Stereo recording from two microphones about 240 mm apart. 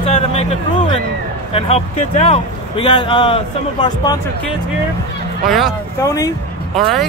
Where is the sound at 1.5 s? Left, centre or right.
Left.